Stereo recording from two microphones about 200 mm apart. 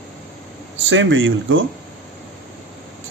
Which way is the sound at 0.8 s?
75° right (ahead or behind).